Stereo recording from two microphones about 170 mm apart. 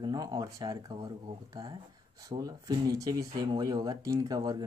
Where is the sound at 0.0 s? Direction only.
25° right (ahead or behind).